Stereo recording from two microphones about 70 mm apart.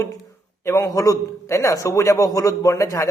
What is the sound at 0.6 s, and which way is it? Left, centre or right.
A man's voice, left.